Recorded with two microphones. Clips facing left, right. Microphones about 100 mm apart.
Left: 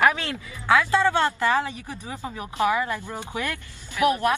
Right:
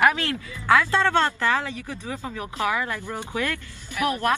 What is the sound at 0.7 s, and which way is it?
Speech, 15° left (ahead or behind).